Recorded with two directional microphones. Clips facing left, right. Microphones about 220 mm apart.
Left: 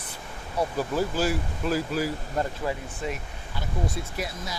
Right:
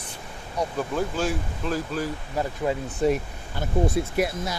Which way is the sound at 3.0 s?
40° right (ahead or behind).